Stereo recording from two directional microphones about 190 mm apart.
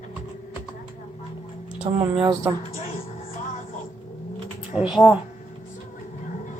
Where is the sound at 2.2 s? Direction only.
20° right (ahead or behind).